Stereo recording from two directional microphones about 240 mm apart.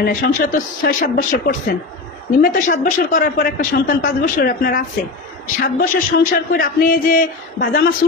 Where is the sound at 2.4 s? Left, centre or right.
Left.